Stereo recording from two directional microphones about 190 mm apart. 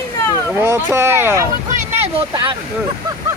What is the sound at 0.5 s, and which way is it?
Speech, 15° right (ahead or behind).